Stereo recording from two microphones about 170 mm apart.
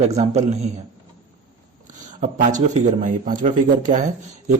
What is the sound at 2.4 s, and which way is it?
A man's voice, 45° right (ahead or behind).